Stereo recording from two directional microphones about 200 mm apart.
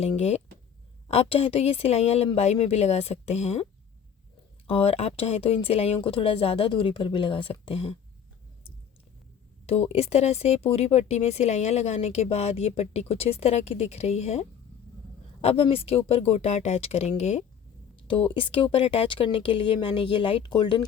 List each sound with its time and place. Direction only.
0.0 s speech: 30° left (ahead or behind)
9.6 s speech: 30° left (ahead or behind)